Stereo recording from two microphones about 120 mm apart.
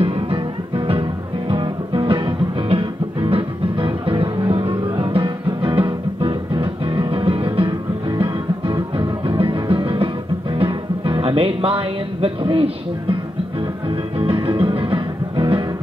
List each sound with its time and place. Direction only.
0.0 s music: 50° right (ahead or behind)
13.8 s music: 45° right (ahead or behind)